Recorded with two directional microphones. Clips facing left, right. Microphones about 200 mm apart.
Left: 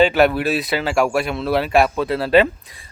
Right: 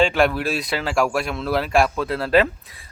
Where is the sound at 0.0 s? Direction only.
5° left (ahead or behind).